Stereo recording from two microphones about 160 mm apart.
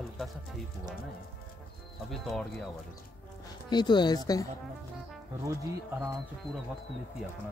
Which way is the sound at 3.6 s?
30° left (ahead or behind).